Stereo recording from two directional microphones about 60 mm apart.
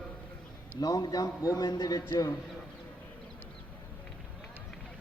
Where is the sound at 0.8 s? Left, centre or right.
Left.